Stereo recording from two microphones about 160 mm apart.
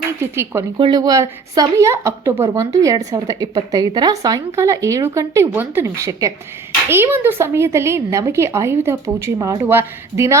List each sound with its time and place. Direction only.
0.8 s speech: 25° right (ahead or behind)